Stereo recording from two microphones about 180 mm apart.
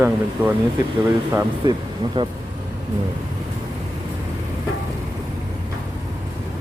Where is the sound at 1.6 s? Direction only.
25° right (ahead or behind).